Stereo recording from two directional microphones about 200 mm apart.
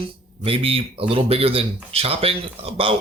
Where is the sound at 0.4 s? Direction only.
30° right (ahead or behind).